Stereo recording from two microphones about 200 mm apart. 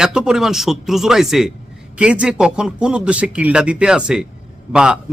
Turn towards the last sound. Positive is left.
turn(degrees=-5)  # may be behind; listen again after turning